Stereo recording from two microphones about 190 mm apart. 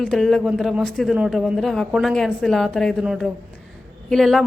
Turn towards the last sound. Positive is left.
turn(degrees=0)  # may be behind; listen again after turning